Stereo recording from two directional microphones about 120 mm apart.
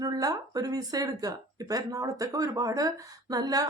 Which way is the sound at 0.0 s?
30° right (ahead or behind).